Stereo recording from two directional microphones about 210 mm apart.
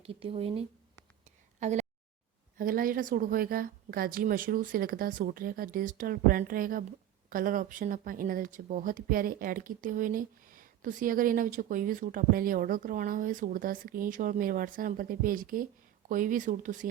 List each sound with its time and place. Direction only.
0.0 s a woman's voice: 25° right (ahead or behind)